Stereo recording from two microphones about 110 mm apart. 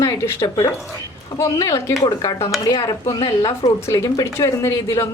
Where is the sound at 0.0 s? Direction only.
25° left (ahead or behind).